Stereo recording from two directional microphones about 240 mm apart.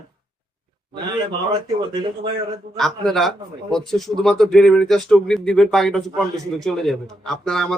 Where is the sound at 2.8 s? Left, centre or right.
Centre.